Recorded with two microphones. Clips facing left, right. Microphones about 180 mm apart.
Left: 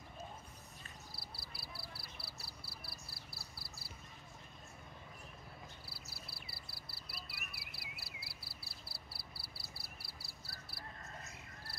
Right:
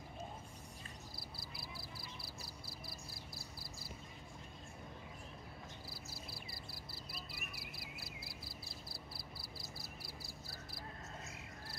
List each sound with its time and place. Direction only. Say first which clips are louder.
1.1 s frog: right 2 dB; 45° right (ahead or behind)
3.3 s a sound: right 3 dB; 45° right (ahead or behind)
6.4 s cricket: right 4 dB; 45° right (ahead or behind)